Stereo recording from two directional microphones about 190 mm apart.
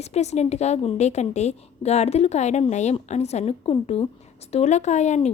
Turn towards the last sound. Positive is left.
turn(degrees=35)  # may be behind; listen again after turning